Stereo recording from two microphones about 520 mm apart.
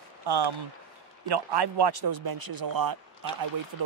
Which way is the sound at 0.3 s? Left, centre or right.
Right.